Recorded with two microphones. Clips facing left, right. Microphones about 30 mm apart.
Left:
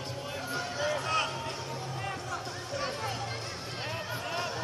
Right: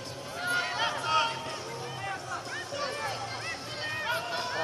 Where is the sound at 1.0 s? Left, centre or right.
Right.